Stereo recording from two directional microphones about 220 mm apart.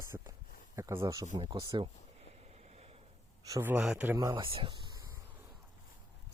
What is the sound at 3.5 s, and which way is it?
Speech, 10° right (ahead or behind).